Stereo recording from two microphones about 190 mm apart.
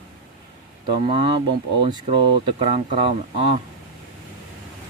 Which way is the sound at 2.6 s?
35° right (ahead or behind).